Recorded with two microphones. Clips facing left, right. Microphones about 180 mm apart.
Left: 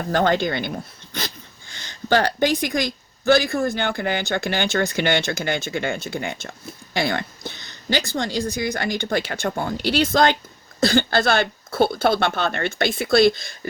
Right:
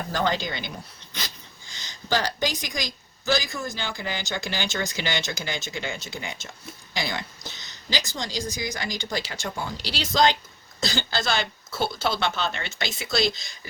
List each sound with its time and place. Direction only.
0.1 s speech: 55° left (ahead or behind)